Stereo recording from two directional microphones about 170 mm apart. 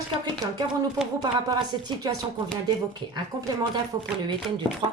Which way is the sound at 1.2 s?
25° right (ahead or behind).